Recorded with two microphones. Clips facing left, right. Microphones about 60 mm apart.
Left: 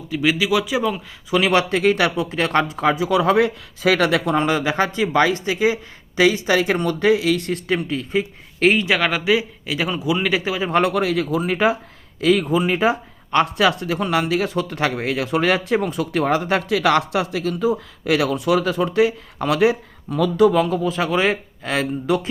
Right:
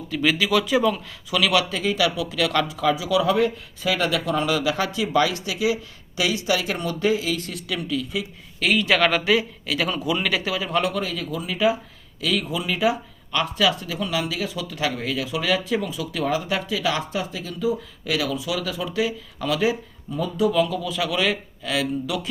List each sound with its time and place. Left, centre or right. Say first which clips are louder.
0.1 s speech: left 2 dB; centre
1.3 s speech: left 4 dB; left
1.7 s speech: left 5 dB; left
4.3 s speech: left 3 dB; left
9.0 s speech: left 1 dB; centre
10.7 s speech: left 7 dB; left
20.1 s speech: left 7 dB; left
20.5 s speech: left 3 dB; left